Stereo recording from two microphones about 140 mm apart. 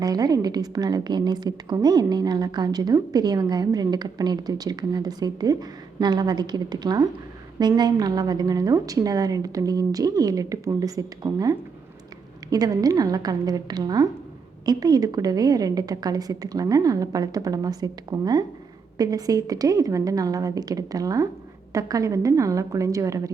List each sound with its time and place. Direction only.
0.0 s a woman's voice: 25° right (ahead or behind)